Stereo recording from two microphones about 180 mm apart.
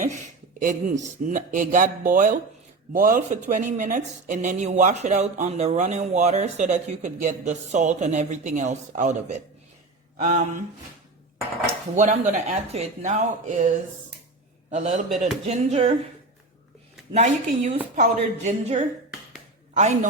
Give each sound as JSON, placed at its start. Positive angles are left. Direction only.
{"t": 0.6, "sound": "speech", "side_deg": -45}
{"t": 11.9, "sound": "speech", "side_deg": -40}
{"t": 17.1, "sound": "speech", "side_deg": -40}